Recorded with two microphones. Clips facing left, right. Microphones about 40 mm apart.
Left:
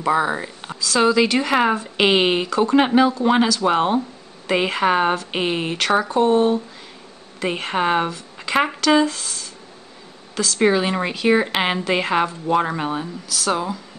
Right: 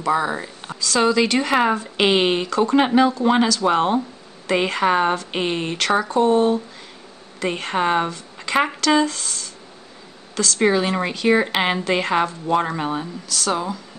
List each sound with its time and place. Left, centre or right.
0.0 s a woman's voice: centre